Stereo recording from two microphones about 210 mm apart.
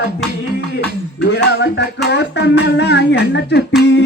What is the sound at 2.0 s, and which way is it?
Speech, 55° left (ahead or behind).